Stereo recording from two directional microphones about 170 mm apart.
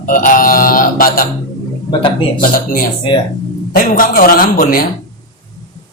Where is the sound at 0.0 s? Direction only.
50° left (ahead or behind).